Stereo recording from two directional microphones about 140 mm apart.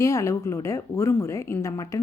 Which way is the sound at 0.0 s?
20° left (ahead or behind).